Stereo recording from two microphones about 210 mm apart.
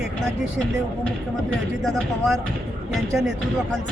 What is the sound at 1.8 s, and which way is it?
Speech, centre (ahead or behind).